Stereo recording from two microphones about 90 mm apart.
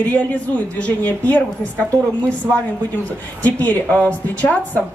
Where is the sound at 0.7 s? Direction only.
15° left (ahead or behind).